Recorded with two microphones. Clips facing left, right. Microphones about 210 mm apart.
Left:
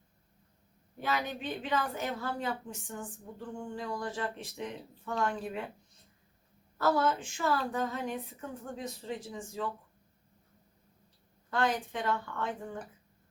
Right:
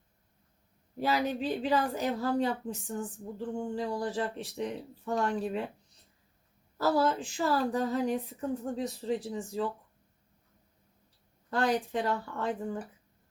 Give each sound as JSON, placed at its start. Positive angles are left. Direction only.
{"t": 0.9, "sound": "a woman's voice", "side_deg": -35}
{"t": 6.7, "sound": "a woman's voice", "side_deg": -35}
{"t": 11.5, "sound": "a woman's voice", "side_deg": -35}